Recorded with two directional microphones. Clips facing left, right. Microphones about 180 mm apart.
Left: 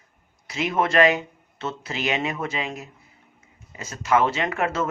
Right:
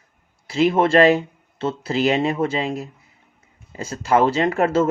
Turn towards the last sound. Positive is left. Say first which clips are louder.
# right 7 dB
turn(degrees=-30)  # may be behind; listen again after turning